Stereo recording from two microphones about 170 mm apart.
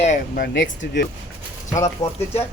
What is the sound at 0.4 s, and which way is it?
Speech, 90° left.